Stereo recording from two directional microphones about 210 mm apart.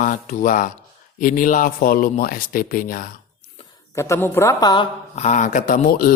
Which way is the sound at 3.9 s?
15° left (ahead or behind).